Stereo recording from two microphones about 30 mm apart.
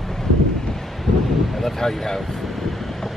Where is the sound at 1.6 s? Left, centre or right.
Centre.